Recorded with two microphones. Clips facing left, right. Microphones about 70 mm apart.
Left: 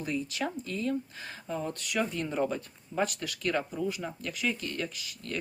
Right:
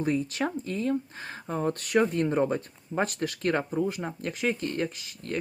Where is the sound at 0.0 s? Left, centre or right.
Right.